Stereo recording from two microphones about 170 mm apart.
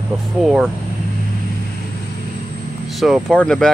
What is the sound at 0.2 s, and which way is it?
Speech, centre (ahead or behind).